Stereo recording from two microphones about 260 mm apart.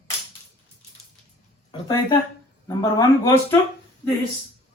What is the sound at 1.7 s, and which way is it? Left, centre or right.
Speech, centre.